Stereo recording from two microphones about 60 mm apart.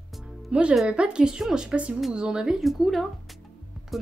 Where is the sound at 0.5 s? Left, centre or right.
Centre.